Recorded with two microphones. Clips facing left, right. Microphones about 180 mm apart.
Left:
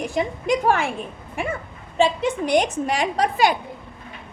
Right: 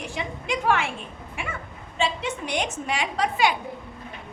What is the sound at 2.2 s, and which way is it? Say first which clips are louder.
A woman's voice: left 8 dB; 40° left (ahead or behind).